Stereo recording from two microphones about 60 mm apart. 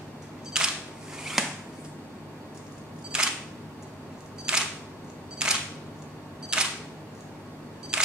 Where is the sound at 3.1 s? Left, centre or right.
Centre.